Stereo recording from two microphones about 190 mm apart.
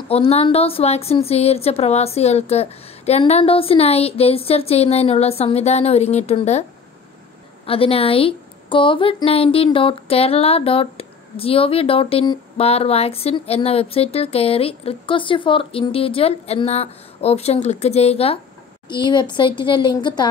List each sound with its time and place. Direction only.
0.1 s a woman's voice: 30° left (ahead or behind)
7.6 s a woman's voice: 30° left (ahead or behind)